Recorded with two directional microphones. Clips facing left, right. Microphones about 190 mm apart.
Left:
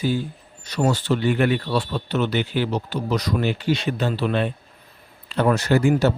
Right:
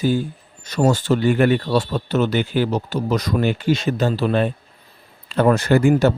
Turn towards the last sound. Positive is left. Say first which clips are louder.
# right 3 dB
turn(degrees=-55)  # may be behind; listen again after turning